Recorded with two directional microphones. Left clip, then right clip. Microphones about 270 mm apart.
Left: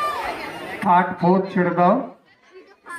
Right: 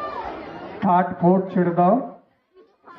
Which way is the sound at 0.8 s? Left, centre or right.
Right.